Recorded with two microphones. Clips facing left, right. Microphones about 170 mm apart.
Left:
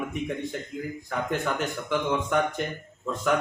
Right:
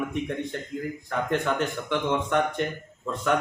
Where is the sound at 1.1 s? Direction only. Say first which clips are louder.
Right 2 dB; centre (ahead or behind).